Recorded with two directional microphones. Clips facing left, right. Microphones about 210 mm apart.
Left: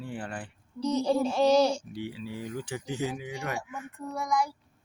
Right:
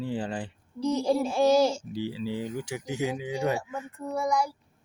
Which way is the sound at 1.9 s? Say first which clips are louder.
Right 4 dB; 90° right.